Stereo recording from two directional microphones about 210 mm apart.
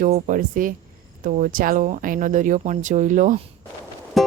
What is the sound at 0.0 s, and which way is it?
Speech, 40° right (ahead or behind).